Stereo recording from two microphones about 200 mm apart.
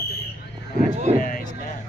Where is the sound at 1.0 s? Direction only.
35° right (ahead or behind).